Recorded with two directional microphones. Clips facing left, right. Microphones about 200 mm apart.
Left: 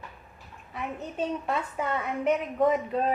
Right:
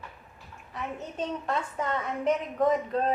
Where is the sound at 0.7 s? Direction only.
5° left (ahead or behind).